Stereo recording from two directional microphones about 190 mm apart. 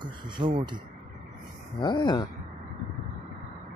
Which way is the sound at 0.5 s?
25° right (ahead or behind).